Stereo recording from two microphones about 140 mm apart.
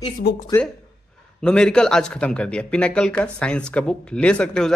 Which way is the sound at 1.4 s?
5° left (ahead or behind).